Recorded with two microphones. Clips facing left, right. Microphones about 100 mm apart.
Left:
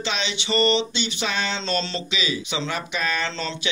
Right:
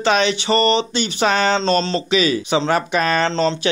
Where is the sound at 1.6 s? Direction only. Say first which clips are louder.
Right 8 dB; 40° right (ahead or behind).